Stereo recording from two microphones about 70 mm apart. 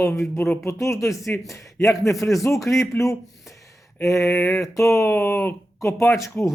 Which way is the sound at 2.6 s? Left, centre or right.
Left.